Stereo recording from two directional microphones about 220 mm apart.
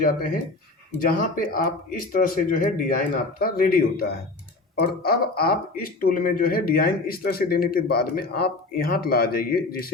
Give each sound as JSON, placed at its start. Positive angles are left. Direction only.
{"t": 0.9, "sound": "speech", "side_deg": 40}